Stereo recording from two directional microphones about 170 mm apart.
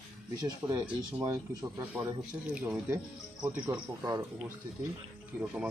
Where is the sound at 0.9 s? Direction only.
15° right (ahead or behind).